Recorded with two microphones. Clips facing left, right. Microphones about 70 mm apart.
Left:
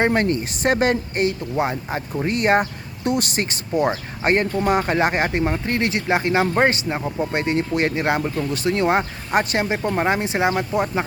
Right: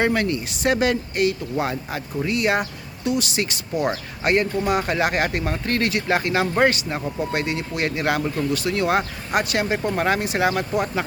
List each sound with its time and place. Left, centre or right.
0.0 s speech: left
2.2 s speech: left